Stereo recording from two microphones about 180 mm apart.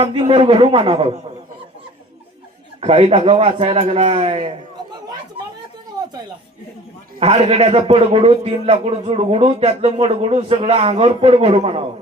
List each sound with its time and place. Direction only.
0.0 s a man's voice: 30° right (ahead or behind)
2.8 s a man's voice: 35° right (ahead or behind)
6.0 s a sound: 20° right (ahead or behind)
7.2 s a man's voice: 35° right (ahead or behind)